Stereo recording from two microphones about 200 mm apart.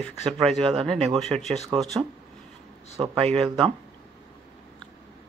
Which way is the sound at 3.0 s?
30° right (ahead or behind).